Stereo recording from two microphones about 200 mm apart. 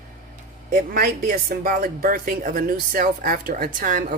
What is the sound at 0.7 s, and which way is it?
Speech, 45° right (ahead or behind).